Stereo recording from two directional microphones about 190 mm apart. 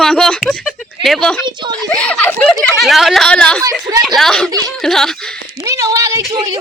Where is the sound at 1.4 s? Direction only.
25° right (ahead or behind).